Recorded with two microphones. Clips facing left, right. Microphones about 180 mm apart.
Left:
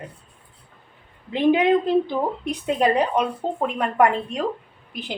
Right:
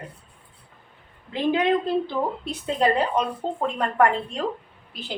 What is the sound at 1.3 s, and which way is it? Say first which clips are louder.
Speech: left 4 dB; 15° left (ahead or behind).